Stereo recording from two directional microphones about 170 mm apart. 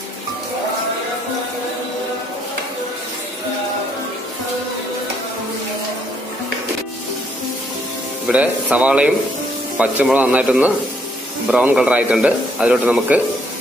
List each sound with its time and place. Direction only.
8.3 s a man's voice: 5° right (ahead or behind)